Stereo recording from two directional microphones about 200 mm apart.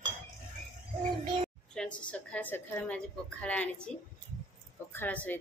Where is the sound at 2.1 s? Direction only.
5° left (ahead or behind).